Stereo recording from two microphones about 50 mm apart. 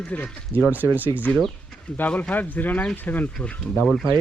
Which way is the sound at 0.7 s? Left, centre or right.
Right.